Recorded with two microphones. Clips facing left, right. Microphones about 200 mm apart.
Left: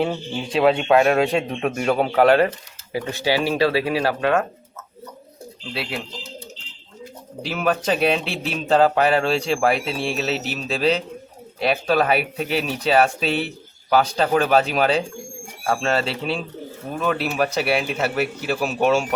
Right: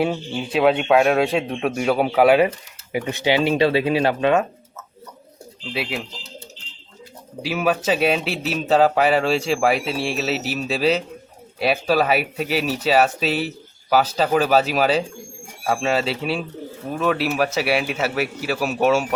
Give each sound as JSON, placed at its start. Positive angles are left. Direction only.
{"t": 0.0, "sound": "speech", "side_deg": -10}
{"t": 5.7, "sound": "speech", "side_deg": -5}
{"t": 7.4, "sound": "speech", "side_deg": -5}